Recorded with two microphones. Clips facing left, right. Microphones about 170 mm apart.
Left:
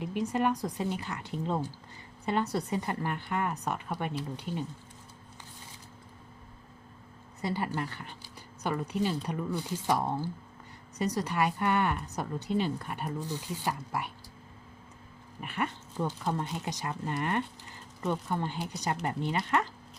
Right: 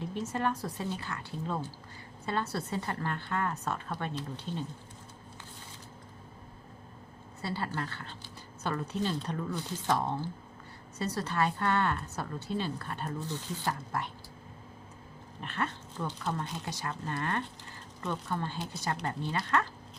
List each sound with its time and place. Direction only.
0.0 s a woman's voice: 15° left (ahead or behind)
7.4 s a woman's voice: 15° left (ahead or behind)
15.4 s a woman's voice: 10° left (ahead or behind)